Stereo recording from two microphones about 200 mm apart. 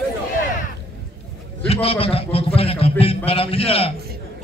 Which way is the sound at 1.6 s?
30° left (ahead or behind).